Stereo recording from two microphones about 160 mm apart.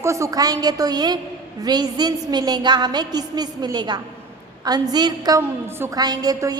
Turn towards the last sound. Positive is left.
turn(degrees=-25)  # may be behind; listen again after turning